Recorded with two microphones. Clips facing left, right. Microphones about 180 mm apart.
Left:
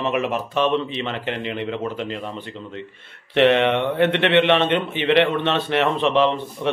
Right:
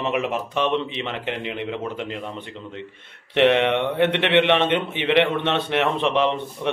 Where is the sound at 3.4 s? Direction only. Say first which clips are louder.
Left 1 dB; 15° right (ahead or behind).